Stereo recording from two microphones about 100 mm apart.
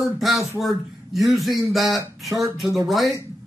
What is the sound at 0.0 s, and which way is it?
Speech, centre (ahead or behind).